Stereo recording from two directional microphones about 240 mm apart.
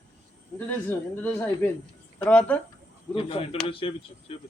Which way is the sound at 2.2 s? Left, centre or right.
Centre.